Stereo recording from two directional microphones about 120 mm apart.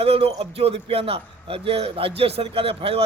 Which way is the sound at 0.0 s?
55° right (ahead or behind).